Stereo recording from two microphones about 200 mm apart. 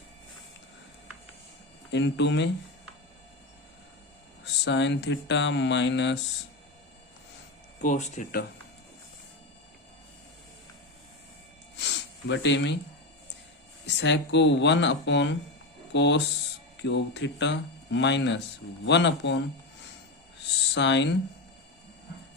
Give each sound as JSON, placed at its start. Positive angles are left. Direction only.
{"t": 1.9, "sound": "speech", "side_deg": 60}
{"t": 4.6, "sound": "speech", "side_deg": 65}
{"t": 7.8, "sound": "speech", "side_deg": 35}
{"t": 11.8, "sound": "a sound", "side_deg": 60}
{"t": 13.8, "sound": "speech", "side_deg": 60}
{"t": 20.7, "sound": "speech", "side_deg": 60}